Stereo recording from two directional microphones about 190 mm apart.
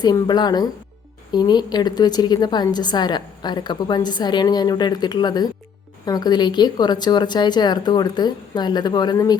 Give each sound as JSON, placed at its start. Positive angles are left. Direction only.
{"t": 0.0, "sound": "a woman's voice", "side_deg": 20}